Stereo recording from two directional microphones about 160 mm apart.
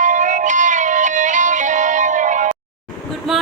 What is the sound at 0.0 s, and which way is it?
Music, 50° right (ahead or behind).